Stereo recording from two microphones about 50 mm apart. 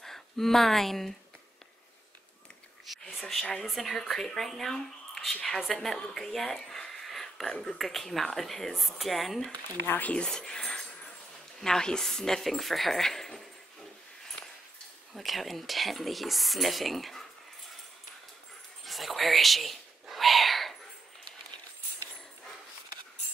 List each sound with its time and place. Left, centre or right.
0.0 s speech: centre
3.2 s speech: centre
6.0 s a sound: centre
7.6 s speech: centre
10.1 s speech: centre
15.1 s speech: centre
18.9 s a sound: centre